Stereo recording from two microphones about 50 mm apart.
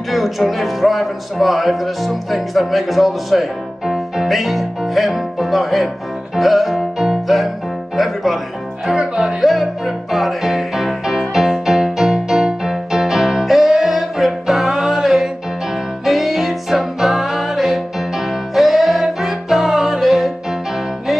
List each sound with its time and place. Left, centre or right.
0.1 s speech: centre
6.3 s music: centre
8.9 s music: centre
9.4 s music: centre